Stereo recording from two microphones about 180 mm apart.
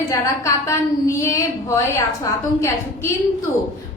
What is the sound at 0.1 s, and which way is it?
A woman's voice, 15° left (ahead or behind).